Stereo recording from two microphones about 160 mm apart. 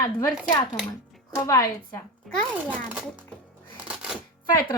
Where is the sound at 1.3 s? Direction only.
20° left (ahead or behind).